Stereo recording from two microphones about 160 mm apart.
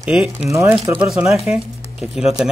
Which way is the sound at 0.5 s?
20° right (ahead or behind).